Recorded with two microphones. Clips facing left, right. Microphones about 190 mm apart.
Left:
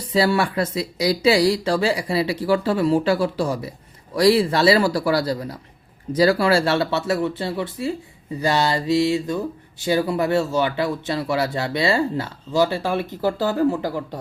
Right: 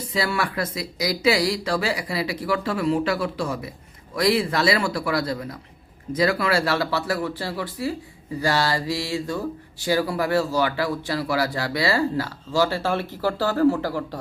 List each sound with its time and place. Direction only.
0.1 s a man's voice: 30° left (ahead or behind)